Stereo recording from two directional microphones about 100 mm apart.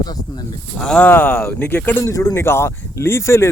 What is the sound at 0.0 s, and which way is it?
Speech, 40° left (ahead or behind).